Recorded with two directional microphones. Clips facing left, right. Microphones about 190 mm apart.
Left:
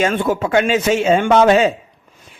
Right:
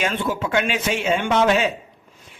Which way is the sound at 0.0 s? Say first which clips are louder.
Left 6 dB; 50° left (ahead or behind).